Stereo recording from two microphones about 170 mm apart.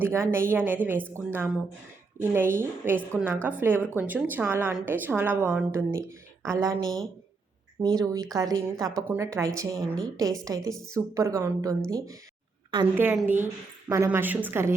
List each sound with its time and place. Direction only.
0.0 s a woman's voice: 15° right (ahead or behind)
6.8 s speech: centre (ahead or behind)
7.8 s a woman's voice: 20° right (ahead or behind)
13.2 s a woman's voice: 10° right (ahead or behind)